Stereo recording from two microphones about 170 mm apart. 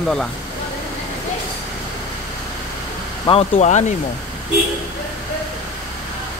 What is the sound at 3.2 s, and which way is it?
Speech, 35° left (ahead or behind).